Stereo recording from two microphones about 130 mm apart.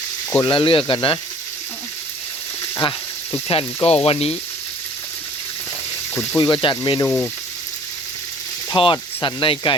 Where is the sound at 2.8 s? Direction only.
40° left (ahead or behind).